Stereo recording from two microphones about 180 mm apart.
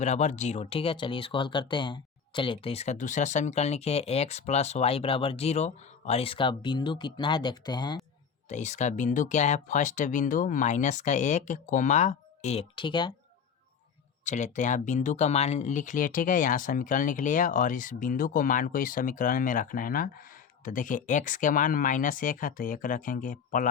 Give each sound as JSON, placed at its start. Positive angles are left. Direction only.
{"t": 0.0, "sound": "speech", "side_deg": 40}
{"t": 8.4, "sound": "speech", "side_deg": 40}
{"t": 14.3, "sound": "speech", "side_deg": 40}